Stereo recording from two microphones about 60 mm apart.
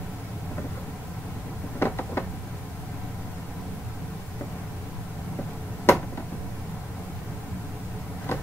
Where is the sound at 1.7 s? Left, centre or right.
Left.